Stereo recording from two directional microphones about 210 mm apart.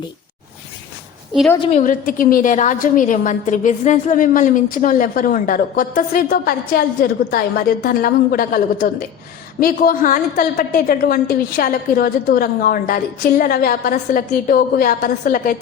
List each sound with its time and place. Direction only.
1.6 s a woman's voice: 35° left (ahead or behind)